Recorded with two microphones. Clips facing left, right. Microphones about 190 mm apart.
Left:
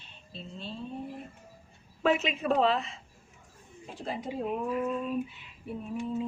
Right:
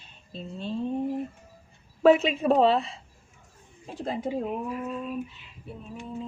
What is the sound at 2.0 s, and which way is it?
A woman's voice, 35° right (ahead or behind).